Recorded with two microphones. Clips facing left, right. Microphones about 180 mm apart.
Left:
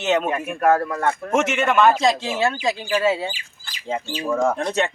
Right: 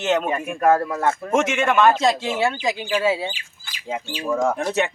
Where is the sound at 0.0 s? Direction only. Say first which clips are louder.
Even; centre (ahead or behind).